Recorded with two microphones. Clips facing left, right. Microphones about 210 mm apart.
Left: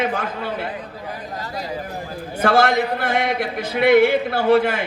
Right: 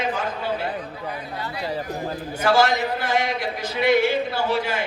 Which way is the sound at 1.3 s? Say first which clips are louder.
Left 1 dB; 40° left (ahead or behind).